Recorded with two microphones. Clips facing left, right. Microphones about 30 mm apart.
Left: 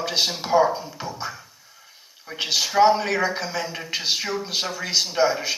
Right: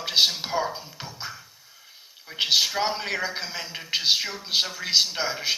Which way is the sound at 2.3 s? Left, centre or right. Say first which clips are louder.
Right 2 dB; centre.